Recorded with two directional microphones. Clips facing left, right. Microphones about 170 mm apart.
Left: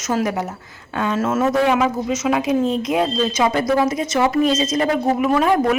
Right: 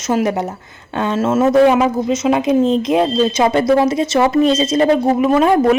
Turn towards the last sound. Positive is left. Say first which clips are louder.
# right 4 dB
turn(degrees=-25)  # may be behind; listen again after turning